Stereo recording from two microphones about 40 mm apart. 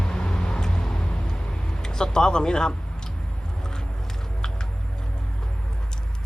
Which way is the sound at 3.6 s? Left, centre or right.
Centre.